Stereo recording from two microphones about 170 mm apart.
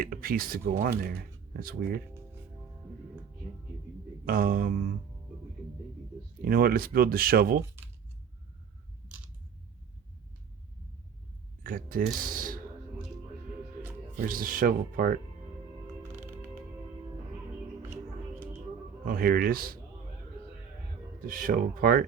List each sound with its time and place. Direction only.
0.0 s speech: 60° right (ahead or behind)
4.3 s speech: 60° right (ahead or behind)
6.4 s speech: 60° right (ahead or behind)
11.6 s speech: 55° right (ahead or behind)
14.2 s speech: 55° right (ahead or behind)
19.0 s speech: 60° right (ahead or behind)
21.2 s speech: 55° right (ahead or behind)